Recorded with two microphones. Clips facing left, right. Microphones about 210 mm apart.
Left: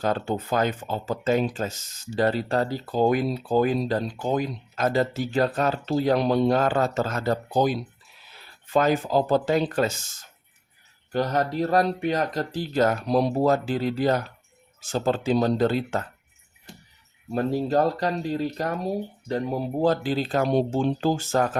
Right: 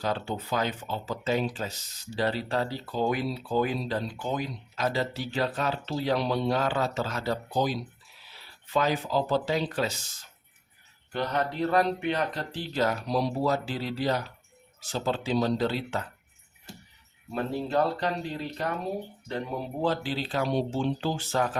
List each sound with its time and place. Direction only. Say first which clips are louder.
0.0 s speech: left 5 dB; 50° left (ahead or behind)
17.3 s speech: left 5 dB; 40° left (ahead or behind)